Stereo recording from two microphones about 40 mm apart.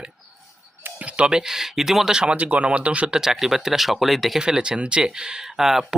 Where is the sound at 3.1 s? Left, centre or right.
Centre.